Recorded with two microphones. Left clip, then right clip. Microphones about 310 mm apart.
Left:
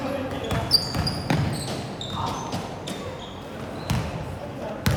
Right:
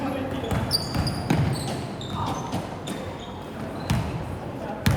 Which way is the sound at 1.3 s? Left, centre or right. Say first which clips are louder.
Even; left.